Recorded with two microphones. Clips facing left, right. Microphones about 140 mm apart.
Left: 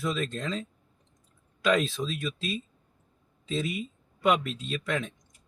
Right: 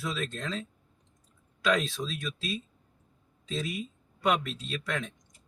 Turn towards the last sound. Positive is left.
turn(degrees=0)  # may be behind; listen again after turning